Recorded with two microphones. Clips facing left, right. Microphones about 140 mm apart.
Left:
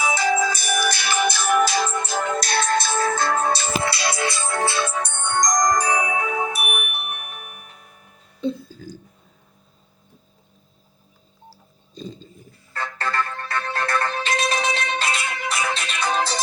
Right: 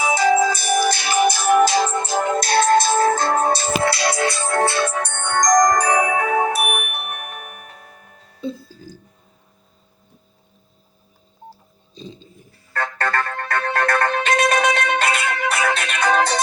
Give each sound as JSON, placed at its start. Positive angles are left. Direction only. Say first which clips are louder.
{"t": 0.0, "sound": "music", "louder": "right 4 dB", "side_deg": -30}
{"t": 2.5, "sound": "music", "louder": "right 9 dB", "side_deg": -50}
{"t": 6.5, "sound": "music", "louder": "right 6 dB", "side_deg": -45}
{"t": 8.4, "sound": "speech", "louder": "left 3 dB", "side_deg": -5}
{"t": 11.9, "sound": "a sound", "louder": "left 2 dB", "side_deg": 50}
{"t": 12.7, "sound": "music", "louder": "right 3 dB", "side_deg": -55}